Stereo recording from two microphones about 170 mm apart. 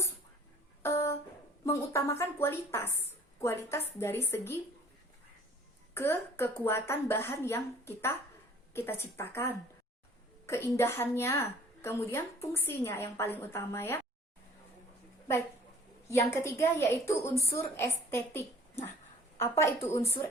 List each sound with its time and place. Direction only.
0.8 s music: 15° left (ahead or behind)
1.6 s a woman's voice: 15° left (ahead or behind)
5.9 s a woman's voice: 15° left (ahead or behind)
16.0 s a woman's voice: 15° left (ahead or behind)